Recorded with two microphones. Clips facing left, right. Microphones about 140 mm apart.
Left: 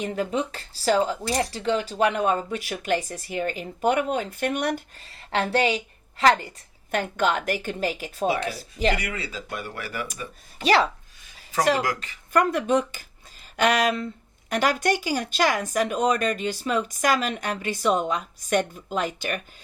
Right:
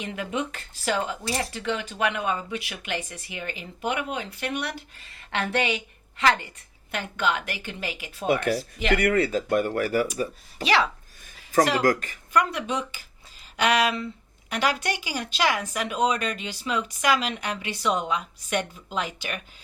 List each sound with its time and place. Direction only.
0.0 s speech: 40° left (ahead or behind)
8.3 s speech: 50° right (ahead or behind)
10.6 s speech: 40° left (ahead or behind)
11.8 s speech: 45° right (ahead or behind)
12.3 s speech: 50° left (ahead or behind)